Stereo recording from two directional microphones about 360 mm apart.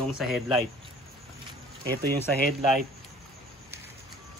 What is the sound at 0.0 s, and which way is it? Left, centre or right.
Speech, centre.